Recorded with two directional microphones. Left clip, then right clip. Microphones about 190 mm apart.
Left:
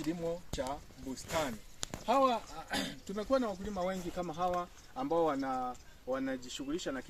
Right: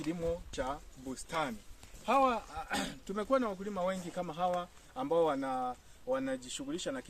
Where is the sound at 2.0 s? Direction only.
5° right (ahead or behind).